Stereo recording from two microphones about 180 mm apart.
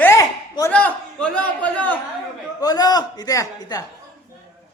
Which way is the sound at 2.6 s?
20° left (ahead or behind).